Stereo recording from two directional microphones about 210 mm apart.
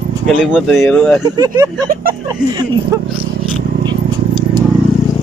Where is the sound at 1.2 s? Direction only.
20° right (ahead or behind).